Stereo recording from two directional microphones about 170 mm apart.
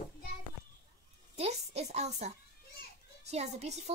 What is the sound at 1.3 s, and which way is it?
A woman's voice, 40° right (ahead or behind).